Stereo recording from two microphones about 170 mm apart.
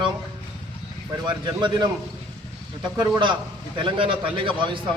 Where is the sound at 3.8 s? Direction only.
30° right (ahead or behind).